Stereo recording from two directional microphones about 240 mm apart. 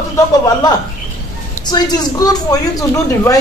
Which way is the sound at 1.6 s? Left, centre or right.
Centre.